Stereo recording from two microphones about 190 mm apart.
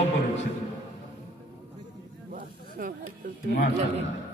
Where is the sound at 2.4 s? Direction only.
45° right (ahead or behind).